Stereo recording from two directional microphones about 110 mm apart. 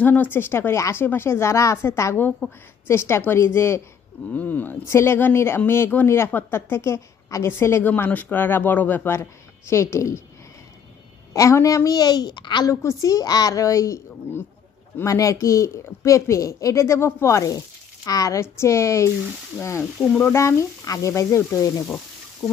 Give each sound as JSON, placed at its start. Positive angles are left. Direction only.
{"t": 0.0, "sound": "speech", "side_deg": 15}
{"t": 11.3, "sound": "a woman's voice", "side_deg": 30}
{"t": 12.6, "sound": "a woman's voice", "side_deg": 30}
{"t": 19.8, "sound": "speech", "side_deg": 5}
{"t": 20.3, "sound": "speech", "side_deg": 30}